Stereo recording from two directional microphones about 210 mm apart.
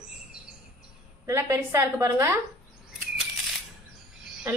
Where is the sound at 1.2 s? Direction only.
15° right (ahead or behind).